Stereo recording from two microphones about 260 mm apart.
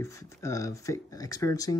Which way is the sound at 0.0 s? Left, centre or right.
Centre.